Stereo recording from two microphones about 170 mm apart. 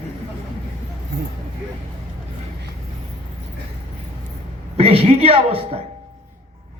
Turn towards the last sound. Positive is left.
turn(degrees=-35)  # may be behind; listen again after turning